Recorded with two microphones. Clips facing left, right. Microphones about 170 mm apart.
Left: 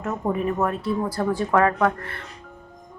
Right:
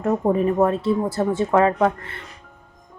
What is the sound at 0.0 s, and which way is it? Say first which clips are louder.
A woman's voice: right 6 dB; 35° right (ahead or behind).